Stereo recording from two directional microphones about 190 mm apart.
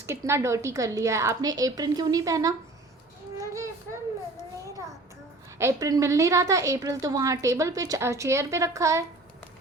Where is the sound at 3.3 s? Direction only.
15° right (ahead or behind).